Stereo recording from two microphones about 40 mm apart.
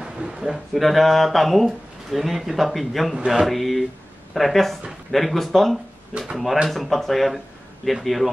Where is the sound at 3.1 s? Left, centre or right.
Centre.